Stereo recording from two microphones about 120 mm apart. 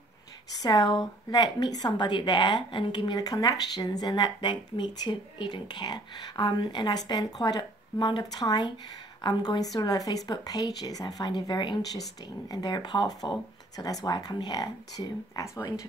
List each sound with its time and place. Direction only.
0.6 s a woman's voice: 35° left (ahead or behind)